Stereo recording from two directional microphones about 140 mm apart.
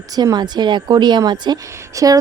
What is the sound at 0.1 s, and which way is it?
A woman's voice, 30° right (ahead or behind).